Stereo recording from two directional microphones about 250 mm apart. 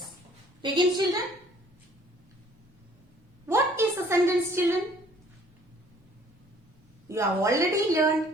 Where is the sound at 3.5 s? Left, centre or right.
Centre.